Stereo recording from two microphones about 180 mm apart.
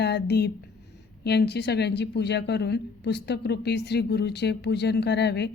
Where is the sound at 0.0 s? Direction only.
65° left (ahead or behind).